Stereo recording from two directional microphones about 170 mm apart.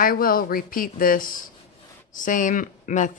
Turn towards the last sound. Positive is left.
turn(degrees=45)  # may be behind; listen again after turning